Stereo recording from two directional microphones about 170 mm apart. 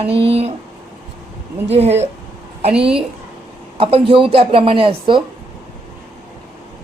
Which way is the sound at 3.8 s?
35° right (ahead or behind).